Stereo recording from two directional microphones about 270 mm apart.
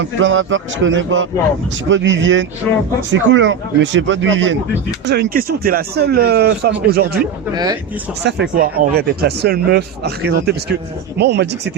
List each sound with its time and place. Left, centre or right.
0.0 s speech: right
7.5 s speech: centre
8.2 s speech: right